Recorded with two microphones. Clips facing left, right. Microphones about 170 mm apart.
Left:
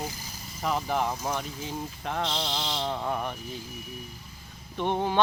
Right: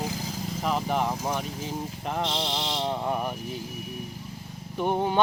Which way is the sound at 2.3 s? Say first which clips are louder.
Right 2 dB; 20° right (ahead or behind).